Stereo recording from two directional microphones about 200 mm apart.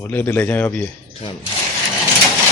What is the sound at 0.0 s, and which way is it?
Speech, 10° left (ahead or behind).